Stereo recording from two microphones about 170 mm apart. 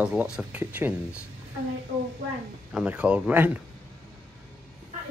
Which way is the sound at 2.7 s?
5° right (ahead or behind).